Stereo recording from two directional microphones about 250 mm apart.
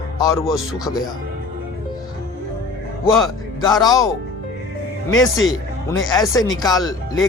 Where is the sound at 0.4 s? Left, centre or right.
Centre.